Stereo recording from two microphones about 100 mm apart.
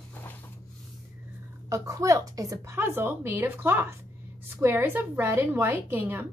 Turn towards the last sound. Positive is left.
turn(degrees=-25)  # may be behind; listen again after turning